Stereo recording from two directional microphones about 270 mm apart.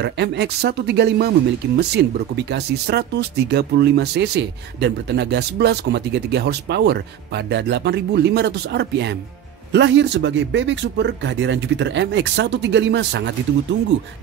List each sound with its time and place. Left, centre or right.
0.0 s speech: right